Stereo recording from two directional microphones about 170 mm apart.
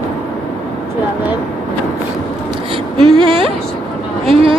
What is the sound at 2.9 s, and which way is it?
Speech, 30° right (ahead or behind).